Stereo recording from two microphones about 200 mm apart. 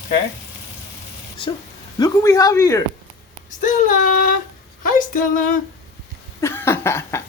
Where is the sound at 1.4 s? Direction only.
25° left (ahead or behind).